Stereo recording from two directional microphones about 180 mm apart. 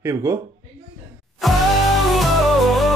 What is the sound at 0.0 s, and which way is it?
Speech, 15° right (ahead or behind).